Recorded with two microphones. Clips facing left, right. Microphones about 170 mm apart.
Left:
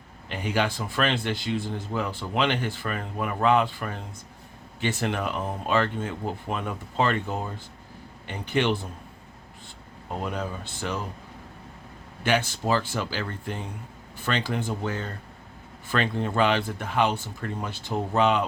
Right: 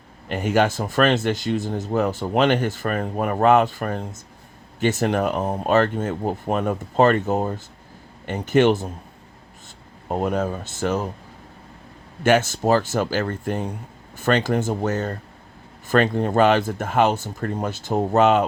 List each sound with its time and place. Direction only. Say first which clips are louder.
0.3 s speech: right 7 dB; 45° right (ahead or behind)
10.1 s speech: right 8 dB; 45° right (ahead or behind)
12.2 s speech: right 7 dB; 45° right (ahead or behind)